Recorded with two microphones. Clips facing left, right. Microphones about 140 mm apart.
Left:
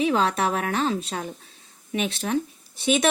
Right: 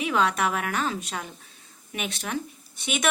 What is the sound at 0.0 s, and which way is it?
A woman's voice, 30° left (ahead or behind).